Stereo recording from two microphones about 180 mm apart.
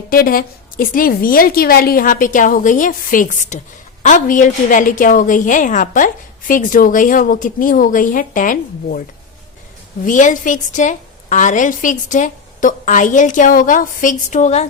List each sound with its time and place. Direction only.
0.1 s a woman's voice: 55° left (ahead or behind)
10.0 s a woman's voice: 45° left (ahead or behind)